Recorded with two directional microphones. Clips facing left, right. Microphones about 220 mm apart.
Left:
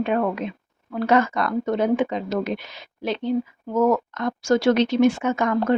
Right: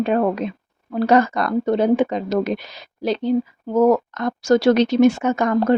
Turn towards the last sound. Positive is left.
turn(degrees=-40)  # may be behind; listen again after turning